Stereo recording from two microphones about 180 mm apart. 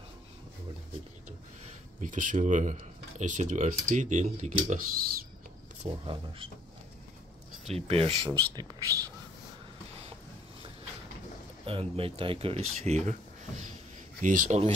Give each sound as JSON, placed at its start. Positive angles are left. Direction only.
{"t": 2.0, "sound": "speech", "side_deg": -45}
{"t": 5.9, "sound": "speech", "side_deg": -25}
{"t": 7.6, "sound": "speech", "side_deg": -35}
{"t": 8.5, "sound": "speech", "side_deg": -20}
{"t": 11.6, "sound": "speech", "side_deg": -30}
{"t": 14.2, "sound": "speech", "side_deg": -45}